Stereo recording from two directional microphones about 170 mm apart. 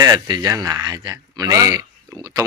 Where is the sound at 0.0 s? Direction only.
25° right (ahead or behind).